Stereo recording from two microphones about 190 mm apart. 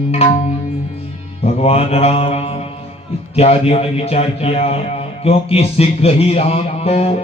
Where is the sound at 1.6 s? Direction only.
30° left (ahead or behind).